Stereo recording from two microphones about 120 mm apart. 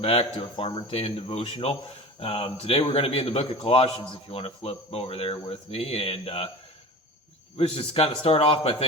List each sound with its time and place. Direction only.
0.0 s speech: 55° left (ahead or behind)
7.5 s speech: 55° left (ahead or behind)